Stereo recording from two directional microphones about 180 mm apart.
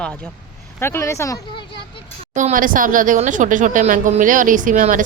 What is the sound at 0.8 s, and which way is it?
Speech, 15° left (ahead or behind).